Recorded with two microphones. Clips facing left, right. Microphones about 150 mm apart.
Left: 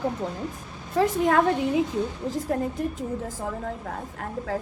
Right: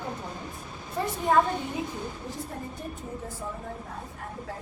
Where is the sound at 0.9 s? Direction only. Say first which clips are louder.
Left 3 dB; 85° left.